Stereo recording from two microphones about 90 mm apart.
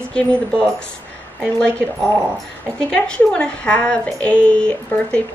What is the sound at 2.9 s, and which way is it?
Speech, 10° left (ahead or behind).